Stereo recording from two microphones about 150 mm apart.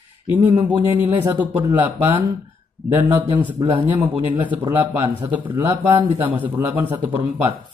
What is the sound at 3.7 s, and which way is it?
Speech, 40° right (ahead or behind).